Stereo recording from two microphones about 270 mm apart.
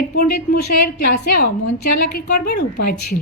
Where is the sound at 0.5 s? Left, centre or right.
Left.